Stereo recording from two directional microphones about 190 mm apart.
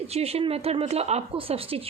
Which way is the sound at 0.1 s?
30° right (ahead or behind).